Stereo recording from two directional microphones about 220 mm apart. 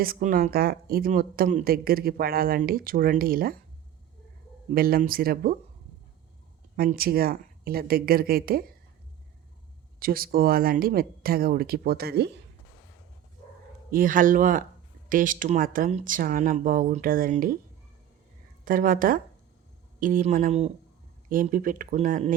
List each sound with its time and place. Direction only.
0.0 s speech: 40° right (ahead or behind)
4.7 s speech: 45° right (ahead or behind)
6.7 s speech: 45° right (ahead or behind)
10.0 s speech: 40° right (ahead or behind)
13.9 s speech: 40° right (ahead or behind)
18.6 s speech: 40° right (ahead or behind)